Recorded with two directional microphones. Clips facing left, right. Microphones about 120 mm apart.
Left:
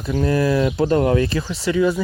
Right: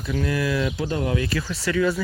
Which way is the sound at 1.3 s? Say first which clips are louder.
Left 3 dB; 20° left (ahead or behind).